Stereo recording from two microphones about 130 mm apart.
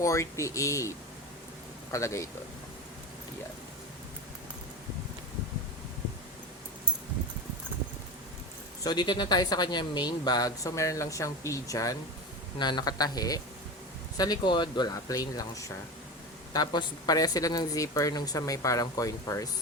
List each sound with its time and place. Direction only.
0.0 s speech: 25° left (ahead or behind)
8.8 s speech: 35° left (ahead or behind)